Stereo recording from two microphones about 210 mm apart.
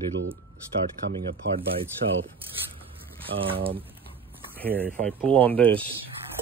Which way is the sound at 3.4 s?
25° right (ahead or behind).